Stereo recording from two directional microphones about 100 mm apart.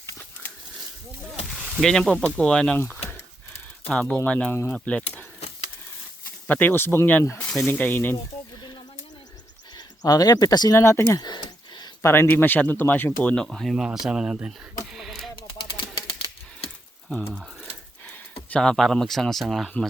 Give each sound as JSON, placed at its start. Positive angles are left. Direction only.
{"t": 0.0, "sound": "a sound", "side_deg": 25}
{"t": 1.8, "sound": "speech", "side_deg": 5}
{"t": 3.8, "sound": "speech", "side_deg": 10}
{"t": 6.5, "sound": "speech", "side_deg": 20}
{"t": 8.1, "sound": "bleat", "side_deg": 45}
{"t": 9.7, "sound": "speech", "side_deg": 40}
{"t": 10.8, "sound": "speech", "side_deg": 25}
{"t": 11.0, "sound": "a sound", "side_deg": 45}
{"t": 12.0, "sound": "speech", "side_deg": 25}
{"t": 14.4, "sound": "a sound", "side_deg": 0}
{"t": 15.4, "sound": "typewriter", "side_deg": 55}
{"t": 18.5, "sound": "speech", "side_deg": 5}